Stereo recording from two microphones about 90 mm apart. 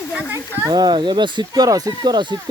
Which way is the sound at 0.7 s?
55° right (ahead or behind).